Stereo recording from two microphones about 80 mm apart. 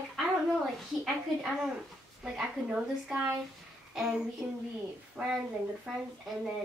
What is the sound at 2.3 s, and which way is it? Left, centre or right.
Speech, centre.